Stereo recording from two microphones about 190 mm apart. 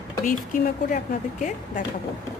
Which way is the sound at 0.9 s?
45° left (ahead or behind).